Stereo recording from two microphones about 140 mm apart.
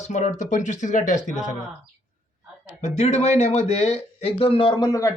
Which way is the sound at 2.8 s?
55° left (ahead or behind).